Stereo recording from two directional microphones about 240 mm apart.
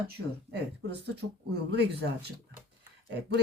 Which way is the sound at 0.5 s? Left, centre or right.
Right.